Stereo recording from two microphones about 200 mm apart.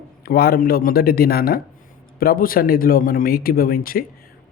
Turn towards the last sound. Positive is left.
turn(degrees=45)  # may be behind; listen again after turning